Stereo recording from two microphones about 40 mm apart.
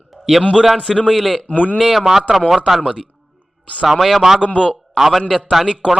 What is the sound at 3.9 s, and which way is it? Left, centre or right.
A man's voice, centre.